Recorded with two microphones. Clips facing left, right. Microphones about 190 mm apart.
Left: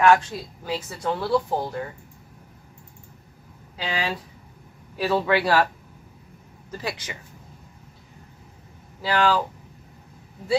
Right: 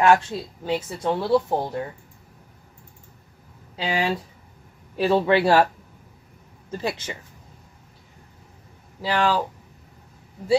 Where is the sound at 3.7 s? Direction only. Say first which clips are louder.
Right 4 dB; 25° right (ahead or behind).